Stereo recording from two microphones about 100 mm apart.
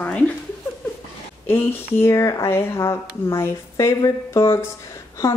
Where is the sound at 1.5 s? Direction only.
20° left (ahead or behind).